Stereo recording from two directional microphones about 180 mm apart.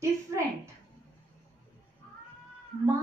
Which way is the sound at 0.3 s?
15° right (ahead or behind).